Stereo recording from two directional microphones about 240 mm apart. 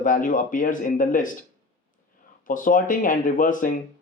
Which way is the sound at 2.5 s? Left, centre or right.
Left.